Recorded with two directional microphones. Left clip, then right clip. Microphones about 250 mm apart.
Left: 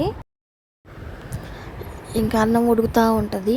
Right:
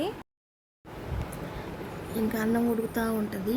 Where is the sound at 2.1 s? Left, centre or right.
Left.